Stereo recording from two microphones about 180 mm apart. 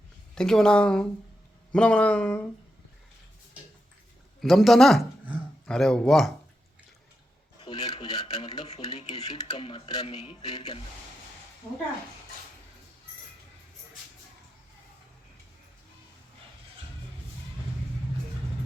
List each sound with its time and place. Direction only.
0.3 s a man's voice: 5° left (ahead or behind)
4.4 s a man's voice: centre (ahead or behind)
7.6 s a sound: 25° left (ahead or behind)
9.2 s speech: 25° left (ahead or behind)